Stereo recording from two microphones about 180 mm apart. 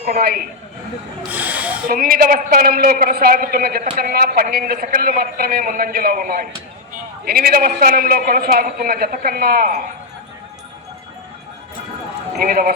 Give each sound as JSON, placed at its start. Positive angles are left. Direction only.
{"t": 0.0, "sound": "a man's voice", "side_deg": -55}
{"t": 1.3, "sound": "speech", "side_deg": -10}
{"t": 1.9, "sound": "a man's voice", "side_deg": -55}
{"t": 12.4, "sound": "a man's voice", "side_deg": -55}